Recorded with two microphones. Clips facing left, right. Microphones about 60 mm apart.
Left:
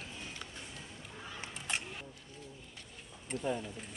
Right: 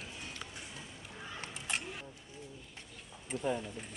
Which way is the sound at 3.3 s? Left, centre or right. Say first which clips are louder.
Right 1 dB; centre.